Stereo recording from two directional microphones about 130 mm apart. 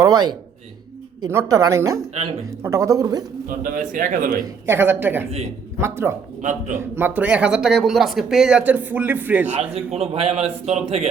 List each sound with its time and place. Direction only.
0.0 s a woman's voice: 30° right (ahead or behind)
3.6 s a man's voice: 90° right
4.6 s a woman's voice: 15° right (ahead or behind)
6.4 s a man's voice: 75° right (ahead or behind)
6.7 s speech: 15° right (ahead or behind)
9.6 s a man's voice: 50° right (ahead or behind)